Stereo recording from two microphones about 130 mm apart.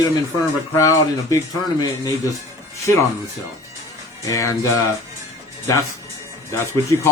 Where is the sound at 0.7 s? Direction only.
25° left (ahead or behind).